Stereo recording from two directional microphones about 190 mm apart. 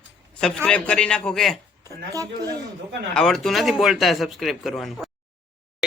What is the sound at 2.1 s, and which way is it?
Speech, 20° right (ahead or behind).